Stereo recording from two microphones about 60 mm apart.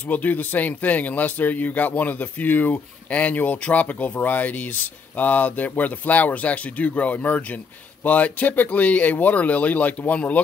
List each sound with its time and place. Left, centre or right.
0.1 s speech: left